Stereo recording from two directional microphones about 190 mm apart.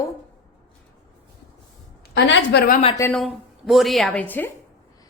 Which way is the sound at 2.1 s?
65° left (ahead or behind).